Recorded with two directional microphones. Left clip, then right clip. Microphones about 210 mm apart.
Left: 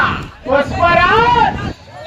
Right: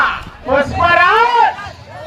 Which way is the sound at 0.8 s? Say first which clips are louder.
Right 1 dB; 15° right (ahead or behind).